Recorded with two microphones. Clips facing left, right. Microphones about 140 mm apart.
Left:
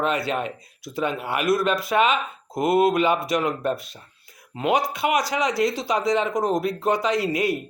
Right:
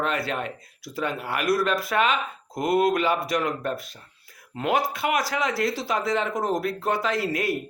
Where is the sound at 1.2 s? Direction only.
25° left (ahead or behind).